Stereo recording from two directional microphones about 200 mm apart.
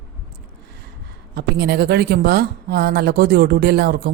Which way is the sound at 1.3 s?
55° right (ahead or behind).